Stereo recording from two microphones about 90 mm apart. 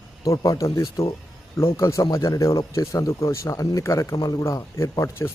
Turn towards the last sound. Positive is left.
turn(degrees=30)  # may be behind; listen again after turning